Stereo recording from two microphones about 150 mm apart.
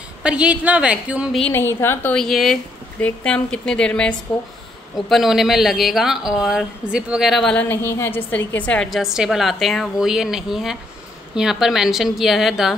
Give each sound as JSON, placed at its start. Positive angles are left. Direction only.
{"t": 0.2, "sound": "a woman's voice", "side_deg": -5}
{"t": 1.4, "sound": "speech", "side_deg": 15}
{"t": 2.1, "sound": "speech", "side_deg": 0}